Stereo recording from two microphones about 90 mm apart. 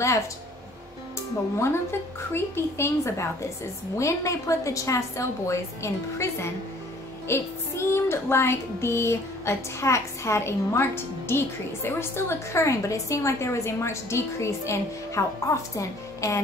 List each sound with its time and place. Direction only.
1.6 s a woman's voice: 25° left (ahead or behind)
3.9 s music: 35° left (ahead or behind)